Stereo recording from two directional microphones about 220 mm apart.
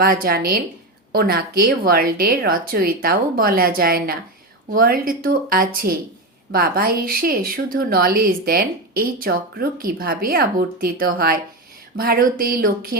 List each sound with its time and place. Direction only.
0.0 s speech: 40° right (ahead or behind)